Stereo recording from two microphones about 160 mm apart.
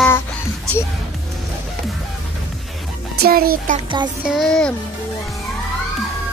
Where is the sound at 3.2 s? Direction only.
65° right (ahead or behind).